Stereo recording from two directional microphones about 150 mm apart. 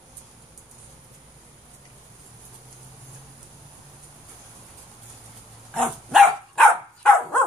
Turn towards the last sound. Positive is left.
turn(degrees=5)  # may be behind; listen again after turning